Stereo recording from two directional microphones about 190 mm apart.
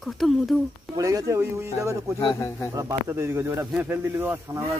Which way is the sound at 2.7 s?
15° right (ahead or behind).